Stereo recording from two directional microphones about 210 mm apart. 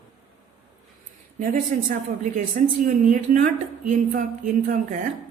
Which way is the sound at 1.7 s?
40° right (ahead or behind).